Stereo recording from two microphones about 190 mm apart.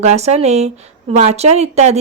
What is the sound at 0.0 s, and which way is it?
A woman's voice, 35° right (ahead or behind).